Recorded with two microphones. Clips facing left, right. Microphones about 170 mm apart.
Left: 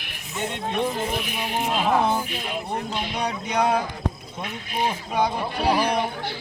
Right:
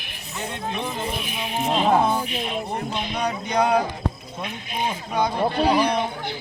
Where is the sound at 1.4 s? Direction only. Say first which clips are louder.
Right 3 dB; 30° right (ahead or behind).